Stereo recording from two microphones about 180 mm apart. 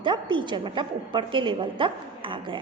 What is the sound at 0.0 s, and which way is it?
A woman's voice, 25° right (ahead or behind).